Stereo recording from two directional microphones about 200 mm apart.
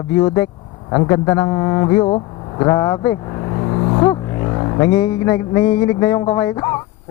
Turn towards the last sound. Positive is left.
turn(degrees=15)  # may be behind; listen again after turning